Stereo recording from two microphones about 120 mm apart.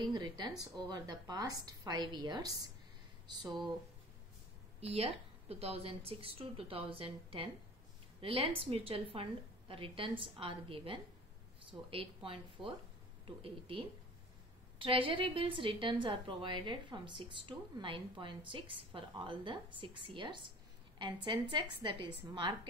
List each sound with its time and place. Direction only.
0.0 s a woman's voice: 40° right (ahead or behind)
4.7 s a woman's voice: 55° right (ahead or behind); by 22.6 s 40° right (ahead or behind)